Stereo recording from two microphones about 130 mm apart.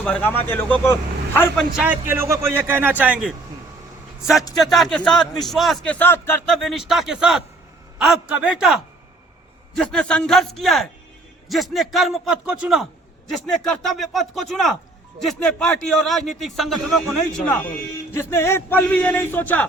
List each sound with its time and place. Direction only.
0.0 s speech: 10° left (ahead or behind)
1.7 s speech: 10° right (ahead or behind)
4.6 s a man's voice: centre (ahead or behind); by 6.4 s 15° left (ahead or behind)
6.5 s a man's voice: centre (ahead or behind)
9.7 s a man's voice: 5° left (ahead or behind)